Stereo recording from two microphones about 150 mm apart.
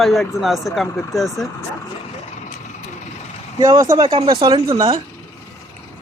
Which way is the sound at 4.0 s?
35° right (ahead or behind).